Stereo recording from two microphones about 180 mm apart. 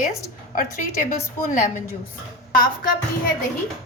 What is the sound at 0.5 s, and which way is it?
A woman's voice, 50° left (ahead or behind).